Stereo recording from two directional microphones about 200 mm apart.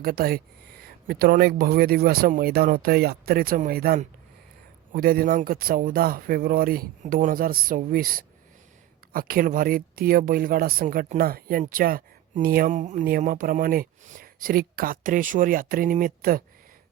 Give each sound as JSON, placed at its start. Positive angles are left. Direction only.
{"t": 0.0, "sound": "speech", "side_deg": -50}